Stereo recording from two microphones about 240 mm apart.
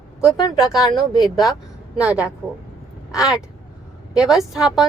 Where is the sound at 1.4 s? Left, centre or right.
Centre.